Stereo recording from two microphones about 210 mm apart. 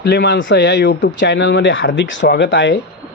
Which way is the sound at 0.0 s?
55° left (ahead or behind).